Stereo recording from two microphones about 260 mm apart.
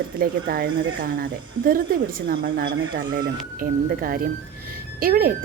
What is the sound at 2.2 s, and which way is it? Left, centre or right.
Speech, right.